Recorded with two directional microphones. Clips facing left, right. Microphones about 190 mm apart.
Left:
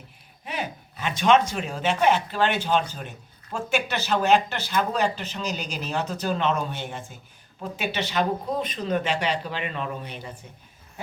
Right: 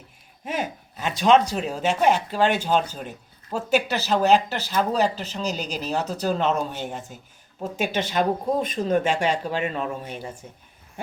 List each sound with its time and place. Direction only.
0.4 s speech: 45° right (ahead or behind)